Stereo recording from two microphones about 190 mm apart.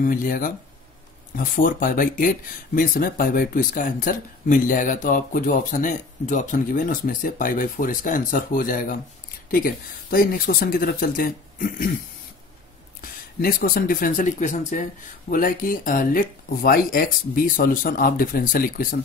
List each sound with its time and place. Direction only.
0.0 s speech: 45° left (ahead or behind)
10.1 s speech: 50° left (ahead or behind)
13.0 s speech: 50° left (ahead or behind)